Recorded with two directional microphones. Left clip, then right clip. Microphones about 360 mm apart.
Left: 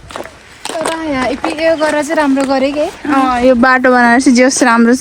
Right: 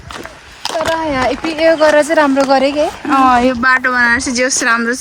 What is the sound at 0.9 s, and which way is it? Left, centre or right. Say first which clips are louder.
Speech: right 1 dB; right.